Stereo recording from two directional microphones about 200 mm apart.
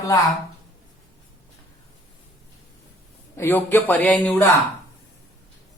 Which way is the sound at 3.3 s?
10° left (ahead or behind).